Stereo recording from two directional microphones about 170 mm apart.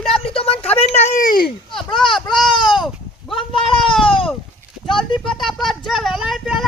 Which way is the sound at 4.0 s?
30° left (ahead or behind).